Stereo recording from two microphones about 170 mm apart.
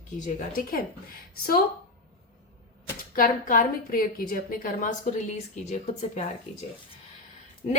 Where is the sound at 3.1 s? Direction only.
55° left (ahead or behind).